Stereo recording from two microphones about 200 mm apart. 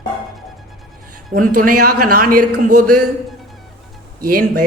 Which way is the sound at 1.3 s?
45° right (ahead or behind).